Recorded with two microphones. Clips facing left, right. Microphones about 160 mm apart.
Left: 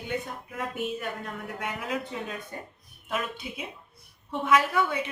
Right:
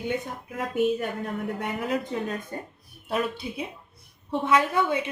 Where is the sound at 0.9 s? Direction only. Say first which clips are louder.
Right 5 dB; 35° right (ahead or behind).